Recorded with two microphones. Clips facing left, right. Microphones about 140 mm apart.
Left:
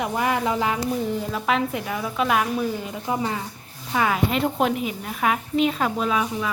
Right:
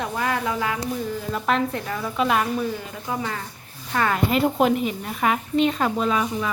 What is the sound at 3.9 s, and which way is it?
A woman's voice, 10° left (ahead or behind).